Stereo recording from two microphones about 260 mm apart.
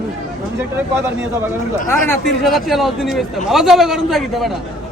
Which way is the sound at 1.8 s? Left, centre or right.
Centre.